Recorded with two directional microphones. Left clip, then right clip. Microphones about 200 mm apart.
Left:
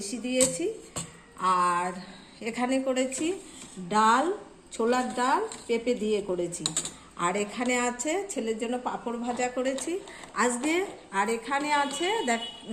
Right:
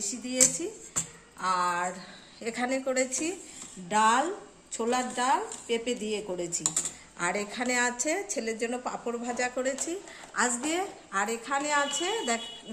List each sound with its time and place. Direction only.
0.1 s a woman's voice: 10° right (ahead or behind); by 9.7 s 25° right (ahead or behind)
10.3 s a woman's voice: 15° right (ahead or behind)